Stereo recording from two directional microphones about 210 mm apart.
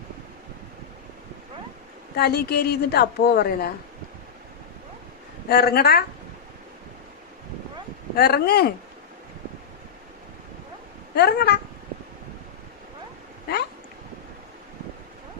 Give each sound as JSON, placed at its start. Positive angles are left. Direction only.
{"t": 2.1, "sound": "a woman's voice", "side_deg": 50}
{"t": 5.5, "sound": "a woman's voice", "side_deg": 50}
{"t": 8.1, "sound": "a woman's voice", "side_deg": 50}
{"t": 11.1, "sound": "a woman's voice", "side_deg": 50}